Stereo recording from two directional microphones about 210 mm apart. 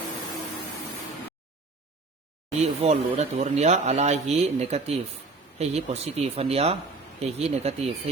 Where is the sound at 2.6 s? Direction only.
30° right (ahead or behind).